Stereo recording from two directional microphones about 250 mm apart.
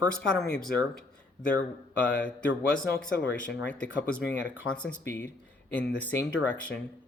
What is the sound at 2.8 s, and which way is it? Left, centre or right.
Speech, centre.